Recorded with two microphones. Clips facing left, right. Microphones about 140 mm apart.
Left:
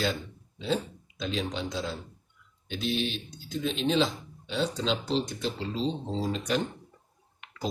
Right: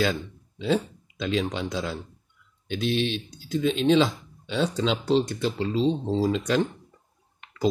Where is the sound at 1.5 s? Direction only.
70° right (ahead or behind).